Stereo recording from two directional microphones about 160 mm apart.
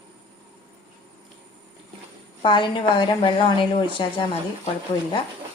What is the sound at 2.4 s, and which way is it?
Speech, 30° left (ahead or behind).